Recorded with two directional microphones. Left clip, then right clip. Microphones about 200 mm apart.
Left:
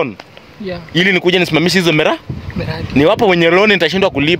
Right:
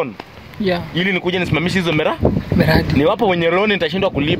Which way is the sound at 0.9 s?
55° left (ahead or behind).